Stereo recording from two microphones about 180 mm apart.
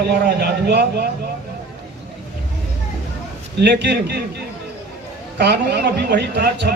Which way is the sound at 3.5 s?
70° right (ahead or behind).